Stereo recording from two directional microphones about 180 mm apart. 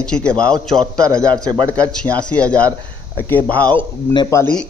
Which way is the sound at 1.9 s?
5° left (ahead or behind).